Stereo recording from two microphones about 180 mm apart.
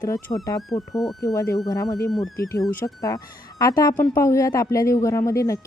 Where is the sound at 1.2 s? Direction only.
20° left (ahead or behind).